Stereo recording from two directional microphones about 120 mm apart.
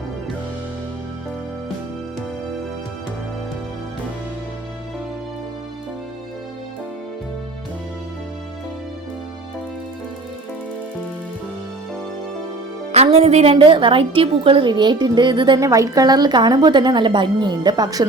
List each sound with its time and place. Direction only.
12.9 s a woman's voice: 60° right (ahead or behind); by 18.0 s 35° right (ahead or behind)